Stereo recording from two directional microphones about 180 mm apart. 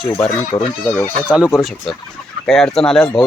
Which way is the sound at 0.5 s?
20° left (ahead or behind).